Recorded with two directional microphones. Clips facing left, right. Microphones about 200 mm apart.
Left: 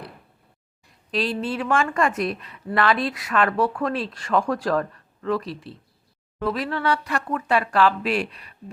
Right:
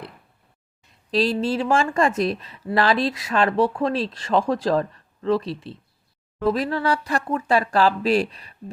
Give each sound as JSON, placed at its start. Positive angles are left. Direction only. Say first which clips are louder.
{"t": 1.1, "sound": "speech", "louder": "right 4 dB", "side_deg": -35}
{"t": 6.5, "sound": "speech", "louder": "right 2 dB", "side_deg": -40}